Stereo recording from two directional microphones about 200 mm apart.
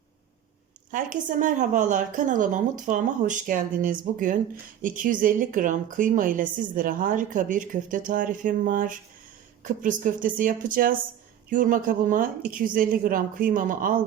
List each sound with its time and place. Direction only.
0.9 s a woman's voice: 40° right (ahead or behind)